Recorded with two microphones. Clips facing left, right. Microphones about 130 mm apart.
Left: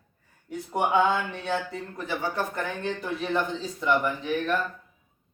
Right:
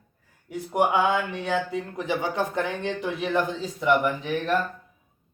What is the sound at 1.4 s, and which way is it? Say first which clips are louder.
Speech: right 3 dB; 15° right (ahead or behind).